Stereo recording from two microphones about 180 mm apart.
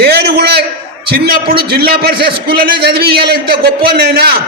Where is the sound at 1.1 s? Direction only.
55° right (ahead or behind).